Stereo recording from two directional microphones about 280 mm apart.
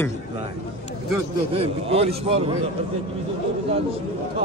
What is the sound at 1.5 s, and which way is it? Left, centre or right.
Speech, right.